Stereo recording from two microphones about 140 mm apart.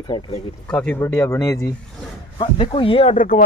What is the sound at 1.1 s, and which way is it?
Speech, 25° left (ahead or behind).